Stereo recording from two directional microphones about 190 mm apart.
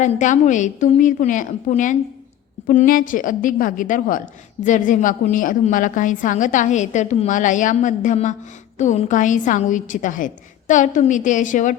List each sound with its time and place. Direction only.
0.0 s a woman's voice: 40° left (ahead or behind)